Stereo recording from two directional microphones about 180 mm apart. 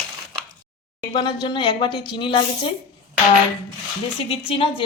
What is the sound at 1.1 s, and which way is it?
Speech, 25° left (ahead or behind).